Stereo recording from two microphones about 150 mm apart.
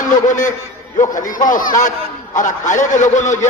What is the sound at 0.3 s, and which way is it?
A man's voice, 55° left (ahead or behind).